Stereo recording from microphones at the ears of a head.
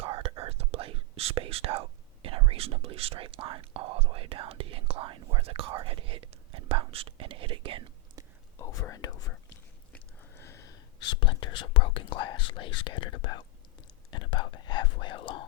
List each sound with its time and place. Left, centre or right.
0.0 s speech: right
8.5 s speech: left